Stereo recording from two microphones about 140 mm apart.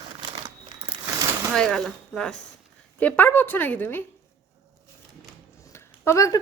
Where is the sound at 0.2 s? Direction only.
35° right (ahead or behind).